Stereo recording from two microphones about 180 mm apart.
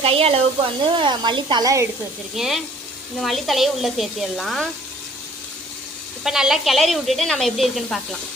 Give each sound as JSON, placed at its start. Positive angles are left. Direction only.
{"t": 0.0, "sound": "speech", "side_deg": -35}
{"t": 2.3, "sound": "speech", "side_deg": 0}
{"t": 6.2, "sound": "speech", "side_deg": -5}